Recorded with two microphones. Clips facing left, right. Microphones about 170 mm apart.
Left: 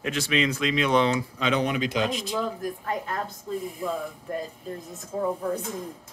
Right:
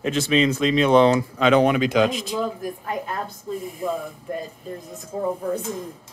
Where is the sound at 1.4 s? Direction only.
65° right (ahead or behind); by 2.1 s 90° right.